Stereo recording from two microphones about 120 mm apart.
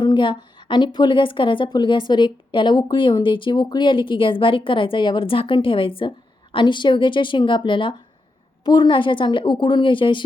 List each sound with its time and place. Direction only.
0.0 s a woman's voice: 40° left (ahead or behind)